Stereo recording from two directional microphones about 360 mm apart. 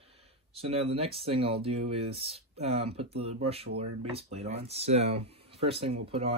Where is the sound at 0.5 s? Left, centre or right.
Centre.